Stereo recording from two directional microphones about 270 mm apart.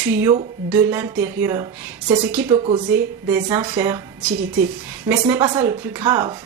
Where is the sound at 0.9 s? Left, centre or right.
Centre.